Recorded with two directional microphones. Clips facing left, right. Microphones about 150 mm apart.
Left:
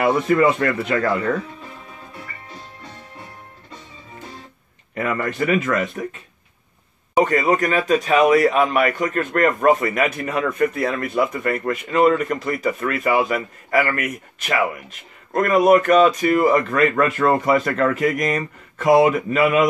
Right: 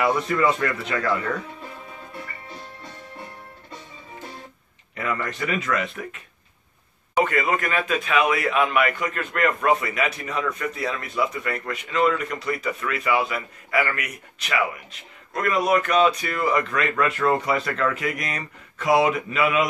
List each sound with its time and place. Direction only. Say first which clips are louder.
0.0 s speech: left 5 dB; 55° left (ahead or behind)
4.9 s speech: left 5 dB; 55° left (ahead or behind)
7.2 s speech: left 5 dB; 35° left (ahead or behind)